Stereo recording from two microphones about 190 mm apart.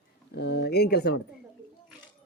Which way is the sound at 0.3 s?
60° left (ahead or behind).